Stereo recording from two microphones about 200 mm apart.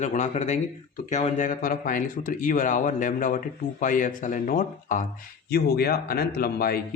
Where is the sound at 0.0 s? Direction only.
35° left (ahead or behind).